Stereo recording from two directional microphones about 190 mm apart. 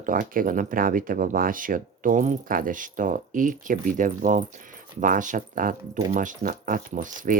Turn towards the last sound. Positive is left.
turn(degrees=-45)  # may be behind; listen again after turning